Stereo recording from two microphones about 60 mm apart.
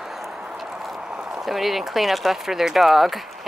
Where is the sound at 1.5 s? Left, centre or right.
Centre.